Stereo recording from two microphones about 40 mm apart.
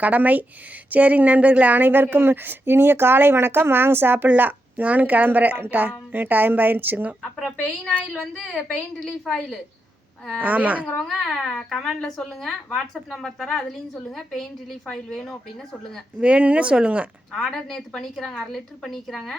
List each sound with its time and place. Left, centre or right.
0.0 s speech: right
4.4 s speech: right
8.1 s a woman's voice: centre
9.3 s a woman's voice: centre
10.4 s speech: right
10.8 s a woman's voice: centre
16.2 s speech: right
17.3 s a woman's voice: centre